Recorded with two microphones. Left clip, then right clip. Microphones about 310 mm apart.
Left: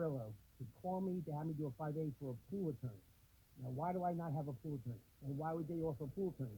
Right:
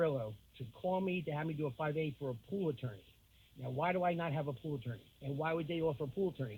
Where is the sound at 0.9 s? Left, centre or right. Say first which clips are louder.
Right 7 dB; right.